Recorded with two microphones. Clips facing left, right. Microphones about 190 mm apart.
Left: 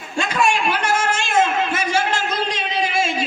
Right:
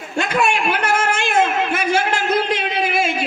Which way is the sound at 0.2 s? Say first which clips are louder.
Right 1 dB; 60° right (ahead or behind).